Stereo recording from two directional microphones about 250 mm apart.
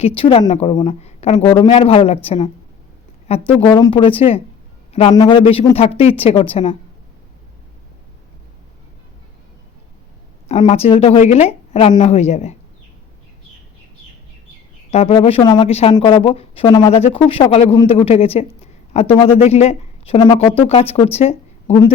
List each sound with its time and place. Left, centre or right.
0.0 s a woman's voice: left
10.5 s a woman's voice: left
14.8 s a woman's voice: left